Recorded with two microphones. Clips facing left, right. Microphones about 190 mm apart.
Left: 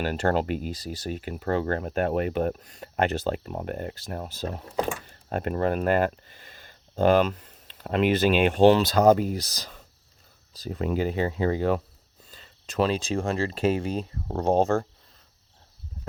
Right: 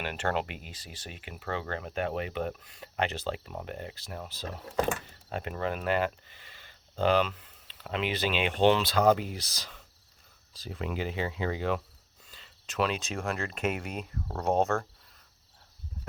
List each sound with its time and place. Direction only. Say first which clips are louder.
0.0 s speech: left 7 dB; 40° left (ahead or behind)